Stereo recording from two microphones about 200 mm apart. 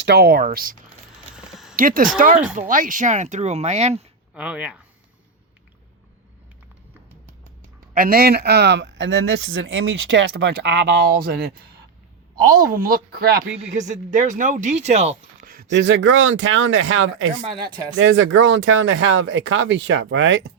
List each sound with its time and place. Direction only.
0.0 s speech: 55° right (ahead or behind)
1.4 s a sound: centre (ahead or behind)
1.7 s speech: 45° right (ahead or behind)
4.4 s speech: 5° right (ahead or behind)
7.9 s speech: 45° right (ahead or behind); by 10.3 s 80° right
10.3 s speech: 55° right (ahead or behind)
13.6 s speech: 35° right (ahead or behind)
15.4 s speech: 45° right (ahead or behind); by 20.4 s 65° right (ahead or behind)